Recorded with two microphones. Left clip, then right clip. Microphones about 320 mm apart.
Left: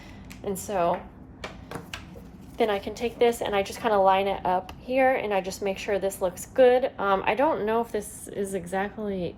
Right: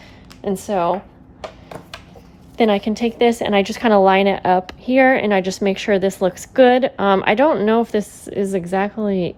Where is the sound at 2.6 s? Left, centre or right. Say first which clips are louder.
Right 9 dB; right.